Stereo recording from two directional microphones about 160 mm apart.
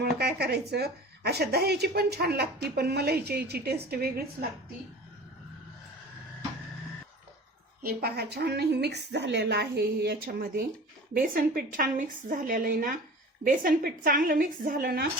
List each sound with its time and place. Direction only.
0.2 s a woman's voice: 85° right
7.8 s a woman's voice: 75° right (ahead or behind)